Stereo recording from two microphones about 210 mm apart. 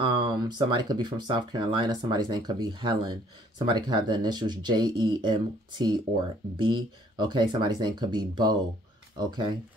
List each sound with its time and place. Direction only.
0.0 s speech: 20° right (ahead or behind)